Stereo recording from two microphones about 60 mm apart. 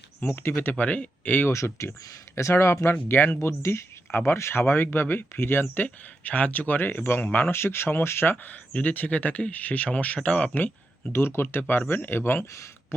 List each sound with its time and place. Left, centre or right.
0.3 s speech: left
1.5 s speech: left
2.9 s speech: left
3.3 s speech: left
7.5 s speech: left
8.7 s speech: left
11.1 s speech: left
11.8 s speech: left